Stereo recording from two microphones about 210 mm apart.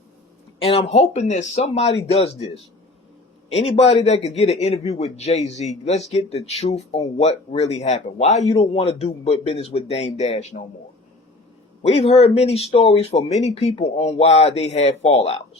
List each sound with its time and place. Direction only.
0.6 s a man's voice: 25° left (ahead or behind)
3.5 s a man's voice: 30° left (ahead or behind)
11.8 s speech: 30° left (ahead or behind)